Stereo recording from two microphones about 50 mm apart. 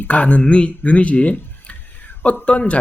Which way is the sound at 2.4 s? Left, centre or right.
Left.